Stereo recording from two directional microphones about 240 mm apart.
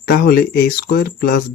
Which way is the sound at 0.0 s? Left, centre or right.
Left.